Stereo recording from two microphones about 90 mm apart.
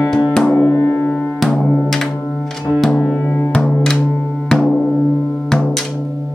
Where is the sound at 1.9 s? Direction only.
5° left (ahead or behind).